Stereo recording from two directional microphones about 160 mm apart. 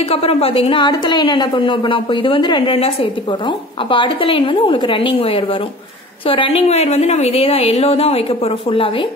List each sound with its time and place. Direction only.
0.1 s a woman's voice: 40° left (ahead or behind)